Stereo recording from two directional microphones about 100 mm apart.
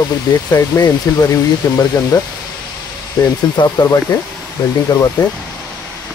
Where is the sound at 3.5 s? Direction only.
40° left (ahead or behind).